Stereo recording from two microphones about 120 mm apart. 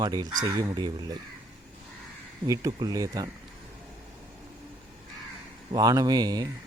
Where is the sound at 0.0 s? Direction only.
35° right (ahead or behind).